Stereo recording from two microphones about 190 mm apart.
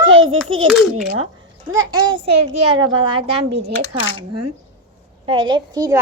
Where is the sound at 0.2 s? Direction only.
90° right.